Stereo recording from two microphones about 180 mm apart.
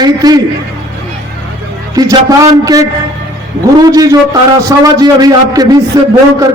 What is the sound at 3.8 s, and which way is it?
A man's voice, 20° right (ahead or behind).